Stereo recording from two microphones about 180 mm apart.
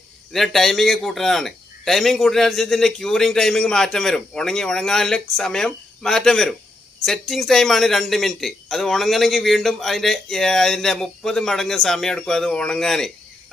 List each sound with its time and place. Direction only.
0.3 s speech: centre (ahead or behind)